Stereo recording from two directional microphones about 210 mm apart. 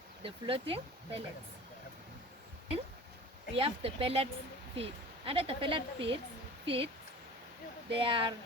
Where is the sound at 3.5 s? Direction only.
25° right (ahead or behind).